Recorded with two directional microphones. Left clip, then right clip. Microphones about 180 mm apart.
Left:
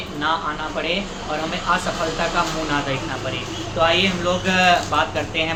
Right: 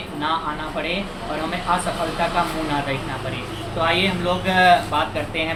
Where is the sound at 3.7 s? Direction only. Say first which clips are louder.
Left 2 dB; 20° left (ahead or behind).